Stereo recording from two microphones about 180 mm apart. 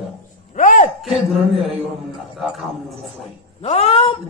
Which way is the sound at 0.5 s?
45° left (ahead or behind).